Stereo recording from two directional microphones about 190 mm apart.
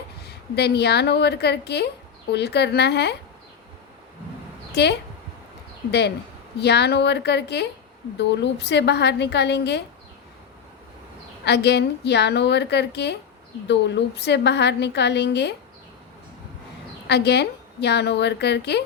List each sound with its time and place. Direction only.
0.3 s a woman's voice: 60° left (ahead or behind)
4.7 s a woman's voice: 60° left (ahead or behind)
6.6 s a woman's voice: 60° left (ahead or behind)
11.4 s a woman's voice: 60° left (ahead or behind)
17.1 s a woman's voice: 60° left (ahead or behind)